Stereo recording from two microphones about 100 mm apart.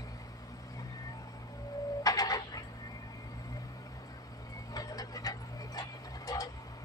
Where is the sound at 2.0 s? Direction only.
40° left (ahead or behind).